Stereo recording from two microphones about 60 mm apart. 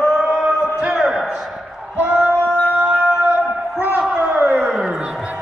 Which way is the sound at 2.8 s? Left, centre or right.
Centre.